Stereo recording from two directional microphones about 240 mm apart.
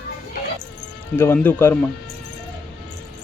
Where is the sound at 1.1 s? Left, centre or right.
Centre.